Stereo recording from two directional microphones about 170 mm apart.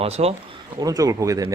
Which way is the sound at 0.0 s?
35° right (ahead or behind).